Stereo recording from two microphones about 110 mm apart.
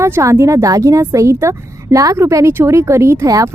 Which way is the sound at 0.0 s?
25° right (ahead or behind).